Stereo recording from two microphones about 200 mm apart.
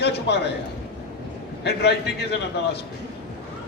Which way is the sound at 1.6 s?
55° left (ahead or behind).